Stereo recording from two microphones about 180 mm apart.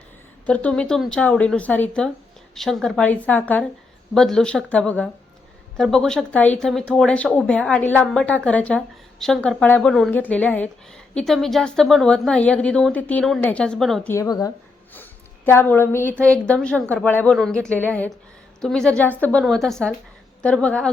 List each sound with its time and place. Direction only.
0.4 s a woman's voice: 5° left (ahead or behind)
14.1 s a woman's voice: 20° left (ahead or behind)